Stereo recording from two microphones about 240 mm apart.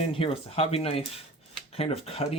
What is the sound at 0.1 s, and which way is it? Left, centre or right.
Speech, left.